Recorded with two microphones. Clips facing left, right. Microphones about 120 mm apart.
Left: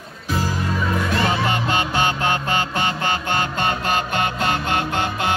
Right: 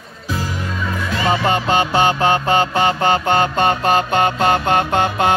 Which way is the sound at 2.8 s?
45° right (ahead or behind).